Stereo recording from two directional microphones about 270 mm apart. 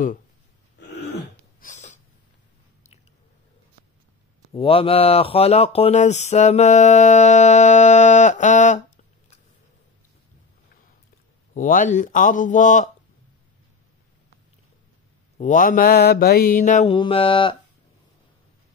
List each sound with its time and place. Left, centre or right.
0.8 s throat clearing: left
1.6 s snort: left
4.5 s speech: centre
11.5 s speech: left
15.3 s speech: left